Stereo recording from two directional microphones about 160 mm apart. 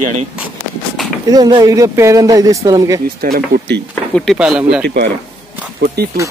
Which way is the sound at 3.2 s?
80° right.